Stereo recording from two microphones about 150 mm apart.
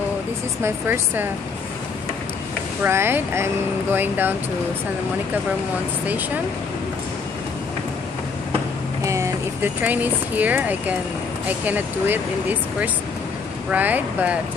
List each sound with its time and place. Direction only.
0.6 s speech: 15° right (ahead or behind)
2.8 s speech: 15° right (ahead or behind)
6.0 s speech: 10° right (ahead or behind)
9.0 s speech: 20° right (ahead or behind)